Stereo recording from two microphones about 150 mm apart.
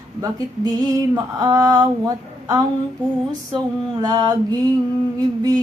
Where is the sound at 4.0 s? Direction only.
25° right (ahead or behind).